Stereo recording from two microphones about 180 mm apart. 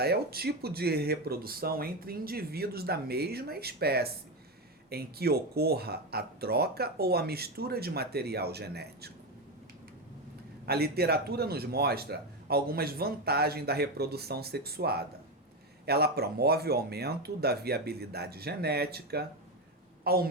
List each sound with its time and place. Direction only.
0.0 s a man's voice: 60° right (ahead or behind)
10.7 s a man's voice: 60° right (ahead or behind)